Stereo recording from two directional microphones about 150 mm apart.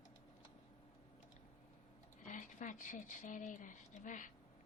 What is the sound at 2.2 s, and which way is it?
Speech, 55° left (ahead or behind).